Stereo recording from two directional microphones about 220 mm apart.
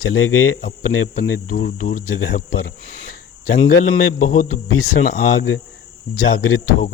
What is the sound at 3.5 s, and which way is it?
Speech, 35° left (ahead or behind).